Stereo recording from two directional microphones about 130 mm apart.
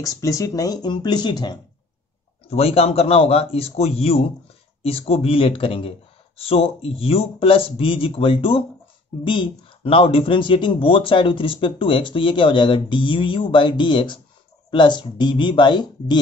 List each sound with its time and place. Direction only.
0.0 s speech: 25° left (ahead or behind)
2.4 s speech: 50° left (ahead or behind); by 16.2 s 35° left (ahead or behind)